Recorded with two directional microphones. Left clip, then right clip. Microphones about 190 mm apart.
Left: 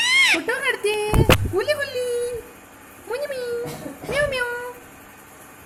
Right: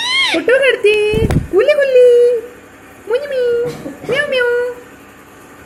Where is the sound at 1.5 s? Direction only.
15° left (ahead or behind).